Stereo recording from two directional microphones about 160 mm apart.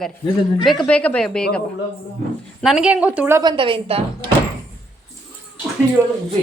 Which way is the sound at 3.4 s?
30° right (ahead or behind).